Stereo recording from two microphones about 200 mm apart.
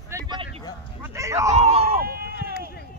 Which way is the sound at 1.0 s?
15° right (ahead or behind).